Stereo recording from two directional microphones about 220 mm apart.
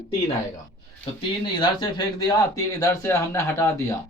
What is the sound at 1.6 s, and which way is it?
A man's voice, 20° left (ahead or behind).